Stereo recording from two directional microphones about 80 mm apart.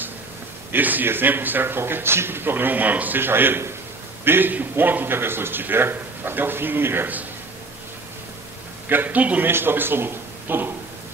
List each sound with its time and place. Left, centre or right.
0.7 s a man's voice: right
8.8 s a man's voice: right